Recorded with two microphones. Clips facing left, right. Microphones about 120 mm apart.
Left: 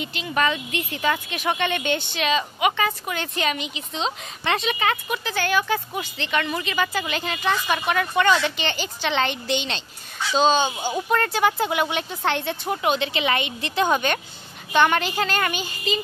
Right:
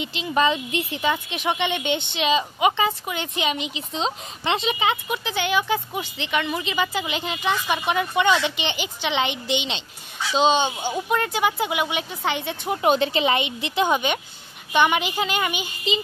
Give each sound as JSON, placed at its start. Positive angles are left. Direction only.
{"t": 0.0, "sound": "a woman's voice", "side_deg": -25}
{"t": 11.1, "sound": "speech", "side_deg": -10}
{"t": 12.8, "sound": "speech", "side_deg": -35}
{"t": 13.2, "sound": "speech", "side_deg": -25}